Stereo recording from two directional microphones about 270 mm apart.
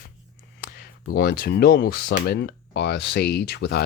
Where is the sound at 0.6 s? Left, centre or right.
Left.